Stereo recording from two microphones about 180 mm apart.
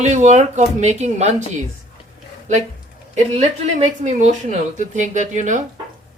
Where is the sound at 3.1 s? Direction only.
40° right (ahead or behind).